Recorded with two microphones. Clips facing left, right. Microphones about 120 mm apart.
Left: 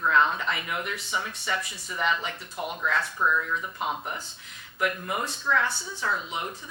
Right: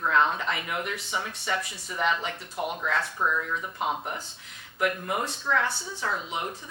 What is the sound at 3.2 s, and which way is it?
Speech, 35° right (ahead or behind).